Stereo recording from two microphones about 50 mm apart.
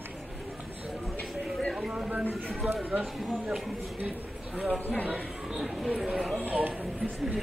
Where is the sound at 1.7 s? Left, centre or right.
Centre.